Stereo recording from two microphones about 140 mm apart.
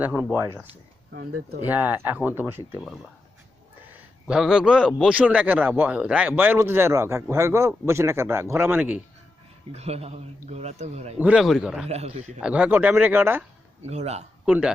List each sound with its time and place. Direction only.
0.0 s a man's voice: 10° right (ahead or behind)
0.4 s speech: 20° right (ahead or behind)
1.2 s speech: 90° right
1.6 s a man's voice: 15° right (ahead or behind)
4.3 s a man's voice: 5° right (ahead or behind)
9.7 s a man's voice: 50° right (ahead or behind)
11.2 s a man's voice: 10° right (ahead or behind)
11.9 s a man's voice: 45° right (ahead or behind)
12.4 s a man's voice: 10° right (ahead or behind)
13.8 s a man's voice: 50° right (ahead or behind)
14.4 s speech: 10° right (ahead or behind)